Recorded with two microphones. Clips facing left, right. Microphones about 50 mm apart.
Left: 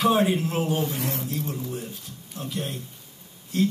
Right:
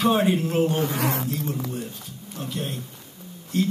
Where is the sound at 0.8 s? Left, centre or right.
Right.